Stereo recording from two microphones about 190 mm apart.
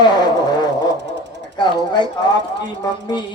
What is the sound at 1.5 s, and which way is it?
Speech, 25° left (ahead or behind).